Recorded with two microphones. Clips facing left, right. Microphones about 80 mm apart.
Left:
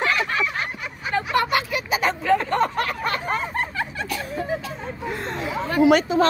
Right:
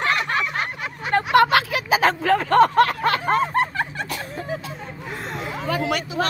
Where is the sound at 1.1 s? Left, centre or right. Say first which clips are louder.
Right 5 dB; right.